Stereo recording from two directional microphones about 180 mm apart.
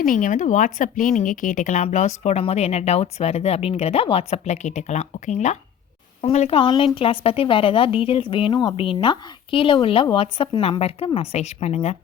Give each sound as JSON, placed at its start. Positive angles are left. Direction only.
{"t": 0.0, "sound": "speech", "side_deg": 50}